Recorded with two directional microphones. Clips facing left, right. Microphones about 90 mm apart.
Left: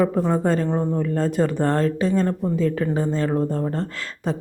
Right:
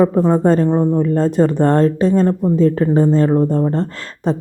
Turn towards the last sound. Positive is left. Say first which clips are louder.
# right 6 dB
turn(degrees=-35)  # may be behind; listen again after turning